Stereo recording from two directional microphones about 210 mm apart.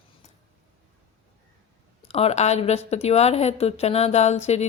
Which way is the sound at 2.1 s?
30° left (ahead or behind).